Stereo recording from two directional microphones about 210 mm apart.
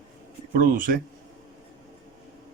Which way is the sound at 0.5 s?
40° right (ahead or behind).